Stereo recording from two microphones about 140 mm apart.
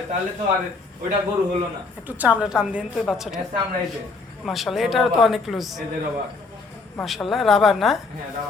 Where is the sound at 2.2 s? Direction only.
10° right (ahead or behind).